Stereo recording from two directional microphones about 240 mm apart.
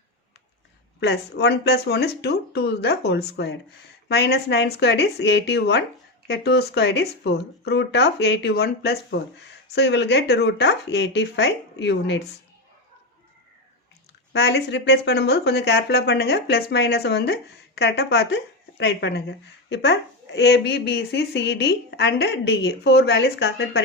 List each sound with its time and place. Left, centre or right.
0.9 s speech: left
14.3 s speech: left